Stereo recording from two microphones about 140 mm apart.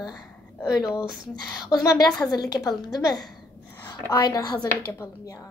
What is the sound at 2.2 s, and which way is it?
Speech, 25° left (ahead or behind).